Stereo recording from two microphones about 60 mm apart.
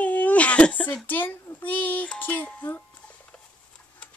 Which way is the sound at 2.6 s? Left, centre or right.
Left.